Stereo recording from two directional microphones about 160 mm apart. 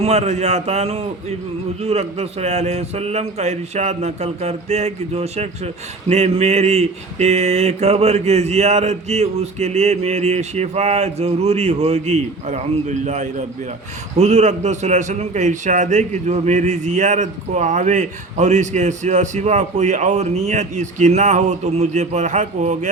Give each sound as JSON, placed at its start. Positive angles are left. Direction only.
{"t": 0.0, "sound": "a man's voice", "side_deg": -45}